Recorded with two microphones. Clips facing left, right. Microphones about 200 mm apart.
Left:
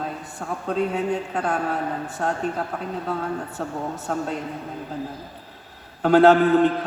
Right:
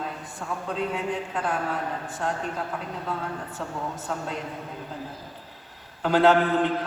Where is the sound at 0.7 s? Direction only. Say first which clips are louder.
Left 6 dB; 45° left (ahead or behind).